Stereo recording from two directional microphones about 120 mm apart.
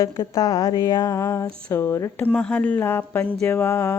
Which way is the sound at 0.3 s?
35° left (ahead or behind).